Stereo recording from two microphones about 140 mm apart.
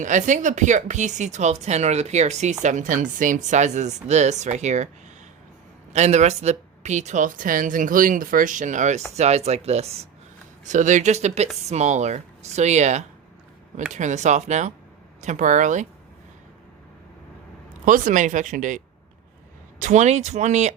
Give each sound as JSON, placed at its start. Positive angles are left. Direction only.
{"t": 0.0, "sound": "speech", "side_deg": -60}
{"t": 5.9, "sound": "speech", "side_deg": -55}
{"t": 10.6, "sound": "speech", "side_deg": -60}
{"t": 17.8, "sound": "speech", "side_deg": -65}
{"t": 19.8, "sound": "speech", "side_deg": -55}